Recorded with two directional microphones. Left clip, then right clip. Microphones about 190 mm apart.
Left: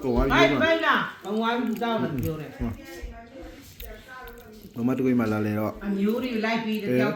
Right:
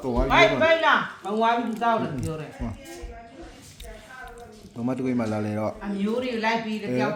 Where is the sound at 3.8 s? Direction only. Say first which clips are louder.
Even; 10° right (ahead or behind).